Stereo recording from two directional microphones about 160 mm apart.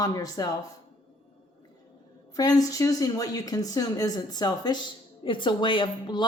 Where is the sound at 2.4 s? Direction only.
20° left (ahead or behind).